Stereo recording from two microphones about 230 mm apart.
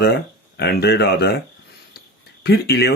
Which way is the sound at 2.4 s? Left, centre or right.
Left.